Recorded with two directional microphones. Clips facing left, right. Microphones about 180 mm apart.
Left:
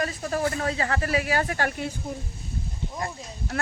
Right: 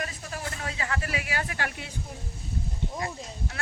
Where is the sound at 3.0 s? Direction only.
50° left (ahead or behind).